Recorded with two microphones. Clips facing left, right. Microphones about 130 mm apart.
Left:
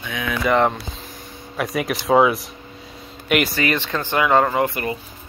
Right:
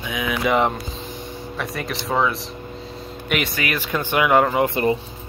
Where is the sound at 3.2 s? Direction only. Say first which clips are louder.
Left 4 dB; centre (ahead or behind).